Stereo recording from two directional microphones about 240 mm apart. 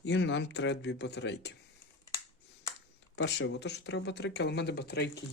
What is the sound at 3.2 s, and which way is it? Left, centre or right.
Speech, left.